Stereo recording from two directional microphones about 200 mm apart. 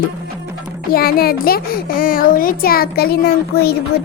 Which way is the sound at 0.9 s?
50° left (ahead or behind).